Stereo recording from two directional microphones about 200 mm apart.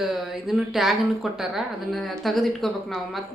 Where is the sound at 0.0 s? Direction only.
Centre (ahead or behind).